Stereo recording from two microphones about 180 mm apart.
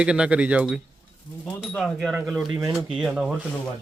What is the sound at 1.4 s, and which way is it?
Speech, 5° left (ahead or behind).